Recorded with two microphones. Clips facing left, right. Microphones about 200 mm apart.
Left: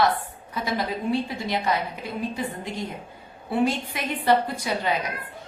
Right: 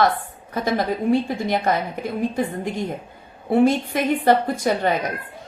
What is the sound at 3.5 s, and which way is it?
A woman's voice, 50° right (ahead or behind).